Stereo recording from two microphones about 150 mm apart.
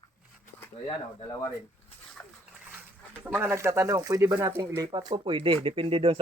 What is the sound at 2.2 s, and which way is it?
Dog, 10° left (ahead or behind).